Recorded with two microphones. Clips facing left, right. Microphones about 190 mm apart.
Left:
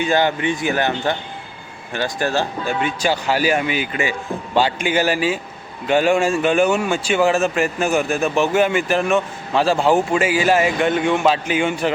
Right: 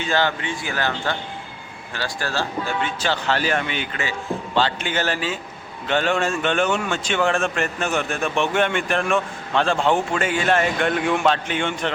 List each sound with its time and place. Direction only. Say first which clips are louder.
0.0 s a man's voice: left 5 dB; 15° left (ahead or behind)